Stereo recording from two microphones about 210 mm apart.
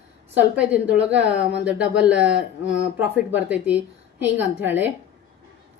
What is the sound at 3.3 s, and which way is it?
A woman's voice, 5° right (ahead or behind).